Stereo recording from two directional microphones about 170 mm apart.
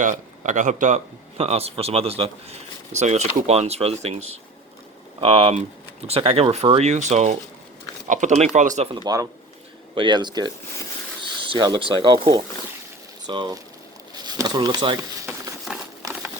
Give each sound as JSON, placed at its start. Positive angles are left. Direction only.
{"t": 0.0, "sound": "speech", "side_deg": -50}
{"t": 5.2, "sound": "speech", "side_deg": -35}
{"t": 8.9, "sound": "speech", "side_deg": -25}
{"t": 15.7, "sound": "a sound", "side_deg": -5}